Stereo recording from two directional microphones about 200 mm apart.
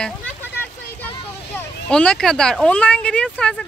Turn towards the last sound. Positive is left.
turn(degrees=5)  # may be behind; listen again after turning